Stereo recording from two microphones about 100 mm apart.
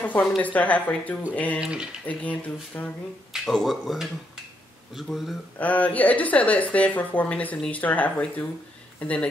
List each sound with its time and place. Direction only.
0.0 s a sound: 15° left (ahead or behind)
0.4 s a woman's voice: 15° left (ahead or behind)
1.6 s speech: 10° right (ahead or behind)
2.0 s a woman's voice: 15° left (ahead or behind)
3.4 s speech: centre (ahead or behind)
5.6 s a woman's voice: 15° left (ahead or behind)